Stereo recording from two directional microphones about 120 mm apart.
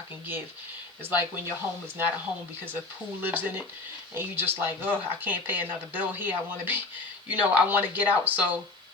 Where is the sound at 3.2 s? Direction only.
15° right (ahead or behind).